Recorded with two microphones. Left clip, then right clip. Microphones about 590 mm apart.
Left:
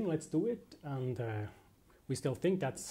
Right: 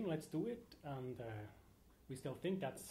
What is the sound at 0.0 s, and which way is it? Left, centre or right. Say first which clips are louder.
Speech: left 8 dB; left.